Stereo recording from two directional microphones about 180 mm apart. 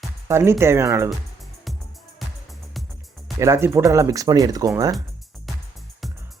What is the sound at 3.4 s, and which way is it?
Speech, 15° right (ahead or behind).